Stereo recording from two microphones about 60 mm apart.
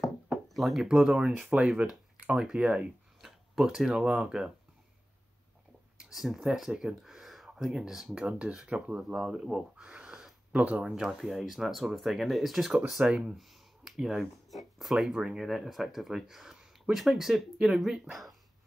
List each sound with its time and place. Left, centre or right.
0.5 s speech: centre
0.8 s speech: centre
2.1 s a sound: right
2.6 s speech: right
3.2 s a sound: centre
4.1 s speech: centre
5.9 s speech: centre
10.5 s speech: centre
10.9 s speech: centre